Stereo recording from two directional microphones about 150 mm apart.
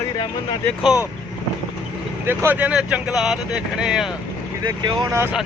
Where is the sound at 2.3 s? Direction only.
10° right (ahead or behind).